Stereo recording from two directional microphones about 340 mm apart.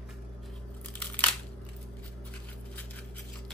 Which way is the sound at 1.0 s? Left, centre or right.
Centre.